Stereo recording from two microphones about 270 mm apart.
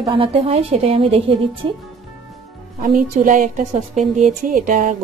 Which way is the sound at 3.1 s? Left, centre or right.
Right.